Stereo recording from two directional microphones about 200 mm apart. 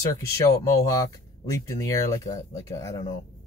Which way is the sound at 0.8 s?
15° left (ahead or behind).